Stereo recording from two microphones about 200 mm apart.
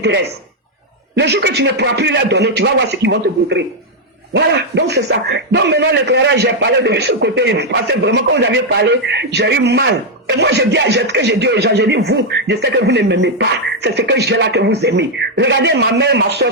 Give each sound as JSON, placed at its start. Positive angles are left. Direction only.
{"t": 0.0, "sound": "a man's voice", "side_deg": -55}